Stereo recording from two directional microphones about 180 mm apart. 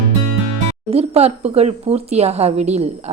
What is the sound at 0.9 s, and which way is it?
Speech, 35° right (ahead or behind).